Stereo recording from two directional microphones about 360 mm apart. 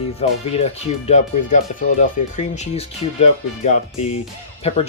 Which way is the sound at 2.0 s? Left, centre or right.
Centre.